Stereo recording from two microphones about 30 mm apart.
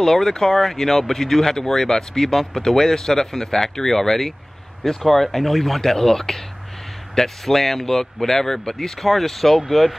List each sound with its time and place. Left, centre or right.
0.0 s speech: centre
7.4 s speech: centre